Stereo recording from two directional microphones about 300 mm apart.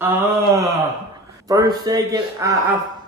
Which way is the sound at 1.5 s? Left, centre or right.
Centre.